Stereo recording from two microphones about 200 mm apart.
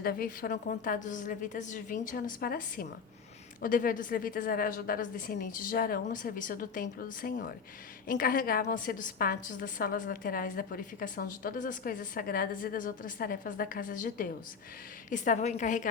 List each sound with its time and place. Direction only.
0.0 s a woman's voice: 45° left (ahead or behind)